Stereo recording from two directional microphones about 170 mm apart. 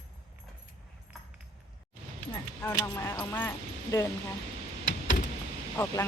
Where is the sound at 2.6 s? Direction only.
15° left (ahead or behind).